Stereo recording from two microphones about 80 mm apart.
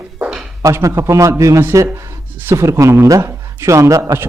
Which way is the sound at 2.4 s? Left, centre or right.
Right.